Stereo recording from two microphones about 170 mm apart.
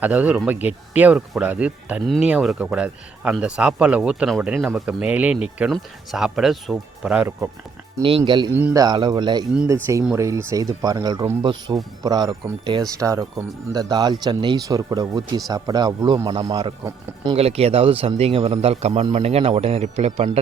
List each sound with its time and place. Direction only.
0.0 s speech: 10° right (ahead or behind)
8.0 s speech: 30° right (ahead or behind)
17.3 s speech: 35° right (ahead or behind)